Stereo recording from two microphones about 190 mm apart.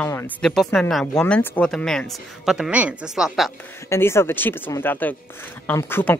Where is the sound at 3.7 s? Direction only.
15° left (ahead or behind).